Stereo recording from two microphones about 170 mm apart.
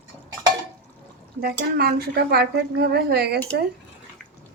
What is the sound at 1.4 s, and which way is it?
Speech, 65° right (ahead or behind).